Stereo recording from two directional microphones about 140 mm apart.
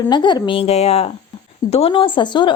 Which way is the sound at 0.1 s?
30° left (ahead or behind).